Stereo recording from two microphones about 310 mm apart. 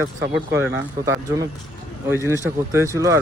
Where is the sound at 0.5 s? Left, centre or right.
Centre.